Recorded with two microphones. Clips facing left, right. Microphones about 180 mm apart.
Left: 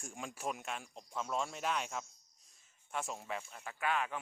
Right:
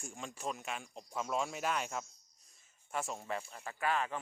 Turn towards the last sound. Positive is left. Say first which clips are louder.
# right 1 dB
turn(degrees=0)  # may be behind; listen again after turning